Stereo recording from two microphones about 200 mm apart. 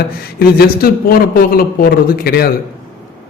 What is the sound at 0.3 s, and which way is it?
A man's voice, 50° left (ahead or behind).